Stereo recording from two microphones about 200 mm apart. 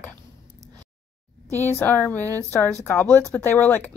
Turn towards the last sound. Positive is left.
turn(degrees=10)  # may be behind; listen again after turning